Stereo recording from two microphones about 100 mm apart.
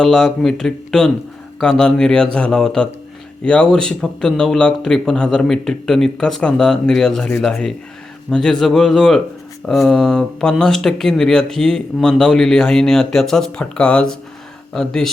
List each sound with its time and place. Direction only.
0.0 s speech: 5° left (ahead or behind)